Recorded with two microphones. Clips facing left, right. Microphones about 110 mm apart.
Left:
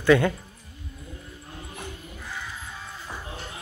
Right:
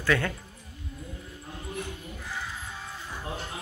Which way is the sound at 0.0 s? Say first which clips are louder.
Left 8 dB; 15° left (ahead or behind).